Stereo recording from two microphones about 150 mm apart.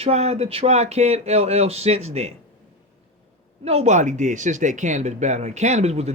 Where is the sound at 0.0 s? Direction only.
45° right (ahead or behind).